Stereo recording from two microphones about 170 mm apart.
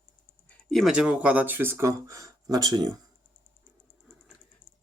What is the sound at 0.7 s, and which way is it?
Speech, centre (ahead or behind).